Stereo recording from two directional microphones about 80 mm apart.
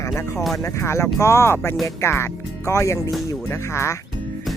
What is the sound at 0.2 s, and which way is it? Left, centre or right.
Speech, left.